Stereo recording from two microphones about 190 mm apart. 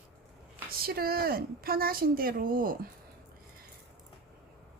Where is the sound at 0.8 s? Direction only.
55° right (ahead or behind).